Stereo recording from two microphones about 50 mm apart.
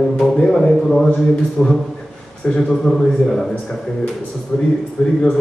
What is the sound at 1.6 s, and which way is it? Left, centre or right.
Speech, left.